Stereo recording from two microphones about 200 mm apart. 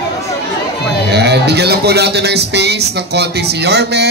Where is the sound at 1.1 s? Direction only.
55° right (ahead or behind).